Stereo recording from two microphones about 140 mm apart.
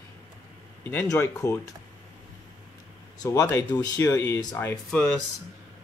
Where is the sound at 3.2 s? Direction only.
25° left (ahead or behind).